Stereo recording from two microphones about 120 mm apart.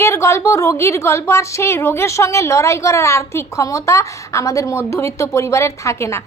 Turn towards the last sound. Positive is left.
turn(degrees=25)  # may be behind; listen again after turning